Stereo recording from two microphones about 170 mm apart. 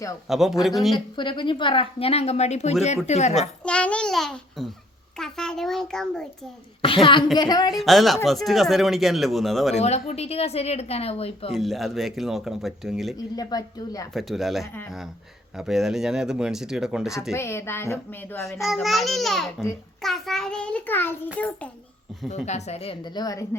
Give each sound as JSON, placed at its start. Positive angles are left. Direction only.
{"t": 0.3, "sound": "speech", "side_deg": 0}
{"t": 0.9, "sound": "a woman's voice", "side_deg": 25}
{"t": 3.6, "sound": "speech", "side_deg": 5}
{"t": 6.8, "sound": "a woman's voice", "side_deg": 30}
{"t": 7.7, "sound": "speech", "side_deg": 0}
{"t": 9.7, "sound": "a woman's voice", "side_deg": 40}
{"t": 11.5, "sound": "speech", "side_deg": 0}
{"t": 13.3, "sound": "speech", "side_deg": 20}
{"t": 14.1, "sound": "speech", "side_deg": 0}
{"t": 17.3, "sound": "speech", "side_deg": 15}
{"t": 18.6, "sound": "speech", "side_deg": 0}
{"t": 22.4, "sound": "a woman's voice", "side_deg": 40}